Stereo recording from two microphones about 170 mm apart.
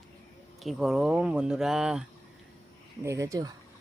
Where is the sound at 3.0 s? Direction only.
20° right (ahead or behind).